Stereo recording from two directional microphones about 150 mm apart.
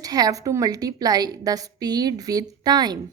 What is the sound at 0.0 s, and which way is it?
A woman's voice, 25° right (ahead or behind).